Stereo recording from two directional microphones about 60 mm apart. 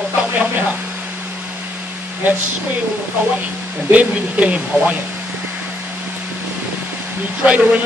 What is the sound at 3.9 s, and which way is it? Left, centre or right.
Speech, right.